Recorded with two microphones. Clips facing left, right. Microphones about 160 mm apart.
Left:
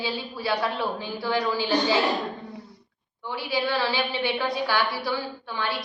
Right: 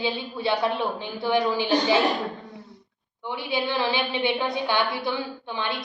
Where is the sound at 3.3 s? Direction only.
20° right (ahead or behind).